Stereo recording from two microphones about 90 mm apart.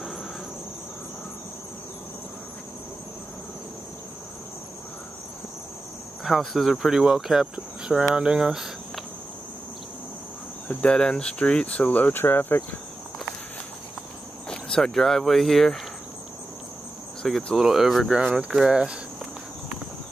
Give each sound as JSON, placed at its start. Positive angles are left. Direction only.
{"t": 6.2, "sound": "speech", "side_deg": 0}
{"t": 7.5, "sound": "cricket", "side_deg": -10}
{"t": 10.7, "sound": "speech", "side_deg": 10}
{"t": 14.5, "sound": "speech", "side_deg": 5}
{"t": 17.2, "sound": "speech", "side_deg": 10}
{"t": 17.6, "sound": "speech", "side_deg": -5}